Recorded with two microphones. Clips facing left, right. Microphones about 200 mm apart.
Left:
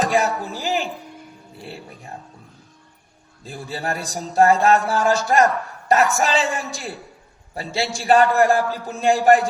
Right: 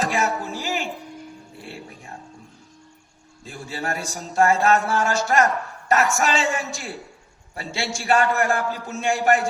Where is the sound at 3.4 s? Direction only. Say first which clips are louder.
Left 2 dB; 35° left (ahead or behind).